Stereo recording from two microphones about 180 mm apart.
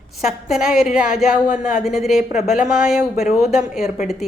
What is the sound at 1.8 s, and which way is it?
Speech, centre (ahead or behind).